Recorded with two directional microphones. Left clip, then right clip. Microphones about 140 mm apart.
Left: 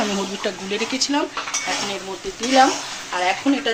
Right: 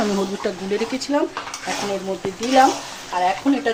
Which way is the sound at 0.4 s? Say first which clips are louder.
Right 1 dB; 50° right (ahead or behind).